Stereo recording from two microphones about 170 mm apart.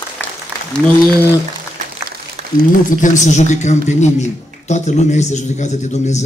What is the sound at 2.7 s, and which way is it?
A man's voice, 50° left (ahead or behind).